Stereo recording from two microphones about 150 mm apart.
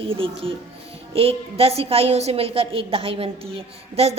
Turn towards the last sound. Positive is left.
turn(degrees=-40)  # may be behind; listen again after turning